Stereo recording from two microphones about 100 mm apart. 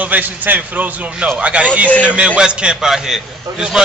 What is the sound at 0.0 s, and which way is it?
A man's voice, 15° right (ahead or behind).